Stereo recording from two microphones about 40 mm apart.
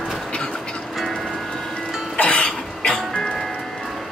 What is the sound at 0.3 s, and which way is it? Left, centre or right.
Vehicle, left.